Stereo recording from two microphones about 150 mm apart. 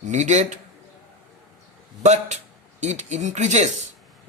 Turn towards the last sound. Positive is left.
turn(degrees=-50)  # may be behind; listen again after turning